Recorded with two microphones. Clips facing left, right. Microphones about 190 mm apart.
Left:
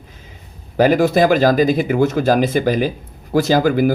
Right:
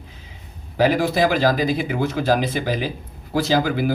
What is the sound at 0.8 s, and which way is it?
Speech, 50° left (ahead or behind).